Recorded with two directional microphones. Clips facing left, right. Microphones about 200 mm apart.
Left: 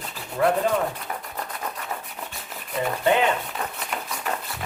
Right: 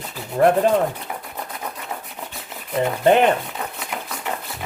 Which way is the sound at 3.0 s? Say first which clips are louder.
Right 6 dB; 55° right (ahead or behind).